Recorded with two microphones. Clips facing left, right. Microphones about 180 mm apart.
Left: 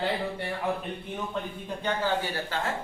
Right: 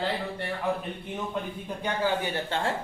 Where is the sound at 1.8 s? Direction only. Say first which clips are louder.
Right 1 dB; 20° right (ahead or behind).